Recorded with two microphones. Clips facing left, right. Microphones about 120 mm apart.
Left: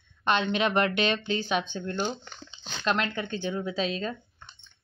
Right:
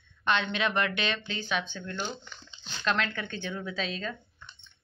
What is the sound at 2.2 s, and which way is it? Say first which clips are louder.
Speech: left 4 dB; 75° left (ahead or behind).